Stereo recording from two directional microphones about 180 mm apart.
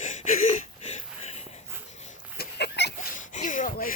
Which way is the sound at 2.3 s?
70° left (ahead or behind).